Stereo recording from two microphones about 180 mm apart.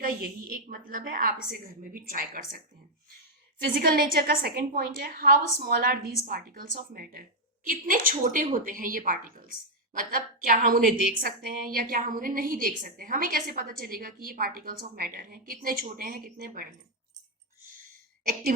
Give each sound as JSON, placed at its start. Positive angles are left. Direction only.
{"t": 0.0, "sound": "speech", "side_deg": -55}
{"t": 3.8, "sound": "a woman's voice", "side_deg": -55}